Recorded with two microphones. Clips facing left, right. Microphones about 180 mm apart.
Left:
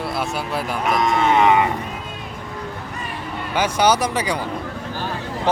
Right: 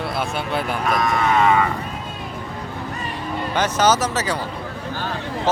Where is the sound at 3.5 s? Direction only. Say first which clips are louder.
Left 1 dB; 10° left (ahead or behind).